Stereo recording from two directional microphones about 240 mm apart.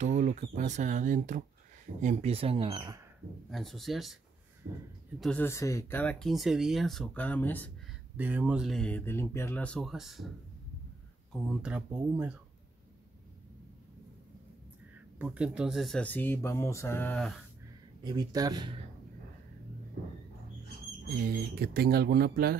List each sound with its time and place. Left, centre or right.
0.0 s speech: right
3.4 s speech: centre
4.6 s speech: right
5.2 s speech: centre
8.2 s speech: centre
11.4 s speech: centre
15.1 s speech: centre
18.0 s speech: centre
21.2 s speech: right